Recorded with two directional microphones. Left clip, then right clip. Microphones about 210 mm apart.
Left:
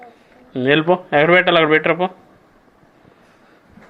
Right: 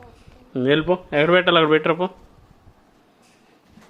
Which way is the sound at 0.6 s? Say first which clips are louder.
Left 4 dB; 15° right (ahead or behind).